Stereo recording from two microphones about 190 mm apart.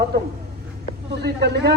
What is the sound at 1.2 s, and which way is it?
Speech, 60° right (ahead or behind).